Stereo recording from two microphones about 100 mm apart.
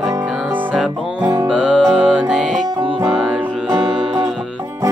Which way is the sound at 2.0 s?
15° right (ahead or behind).